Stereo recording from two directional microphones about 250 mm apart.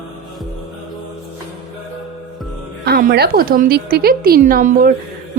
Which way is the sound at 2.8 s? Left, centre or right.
Right.